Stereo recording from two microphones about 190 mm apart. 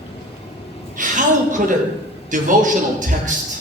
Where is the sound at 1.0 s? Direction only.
40° right (ahead or behind).